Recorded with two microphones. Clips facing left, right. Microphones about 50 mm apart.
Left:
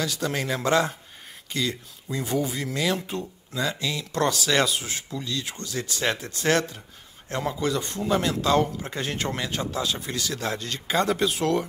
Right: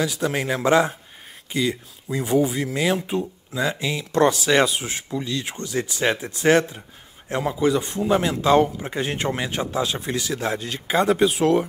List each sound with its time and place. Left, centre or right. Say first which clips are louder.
0.0 s a man's voice: right 4 dB; centre